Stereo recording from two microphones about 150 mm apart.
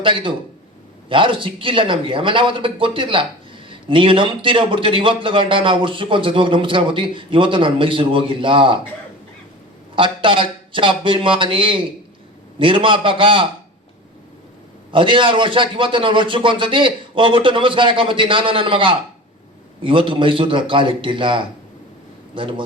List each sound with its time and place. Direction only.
0.0 s a man's voice: 35° right (ahead or behind)
9.9 s a man's voice: 35° right (ahead or behind)
14.9 s a man's voice: 35° right (ahead or behind)